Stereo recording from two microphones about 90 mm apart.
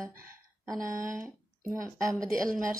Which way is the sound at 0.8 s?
30° right (ahead or behind).